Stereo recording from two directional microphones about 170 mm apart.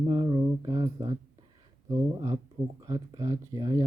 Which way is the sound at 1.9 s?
20° right (ahead or behind).